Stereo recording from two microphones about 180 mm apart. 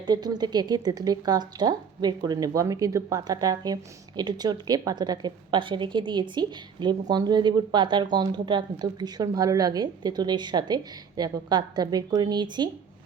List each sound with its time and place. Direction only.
0.1 s a woman's voice: 20° right (ahead or behind)